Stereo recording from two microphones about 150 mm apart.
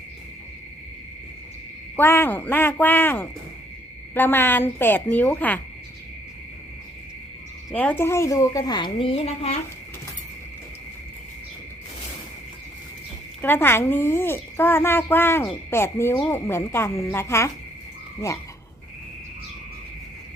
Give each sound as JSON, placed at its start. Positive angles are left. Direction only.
{"t": 2.0, "sound": "a woman's voice", "side_deg": 15}
{"t": 7.7, "sound": "a woman's voice", "side_deg": 10}
{"t": 13.4, "sound": "a woman's voice", "side_deg": 15}